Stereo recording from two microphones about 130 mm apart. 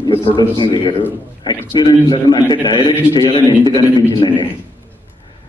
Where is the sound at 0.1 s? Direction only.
35° left (ahead or behind).